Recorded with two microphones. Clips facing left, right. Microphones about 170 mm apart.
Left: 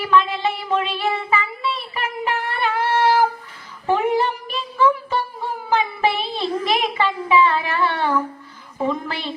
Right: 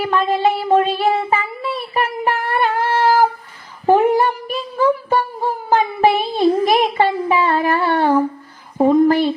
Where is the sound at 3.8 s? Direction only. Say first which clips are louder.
Right 6 dB; 45° right (ahead or behind).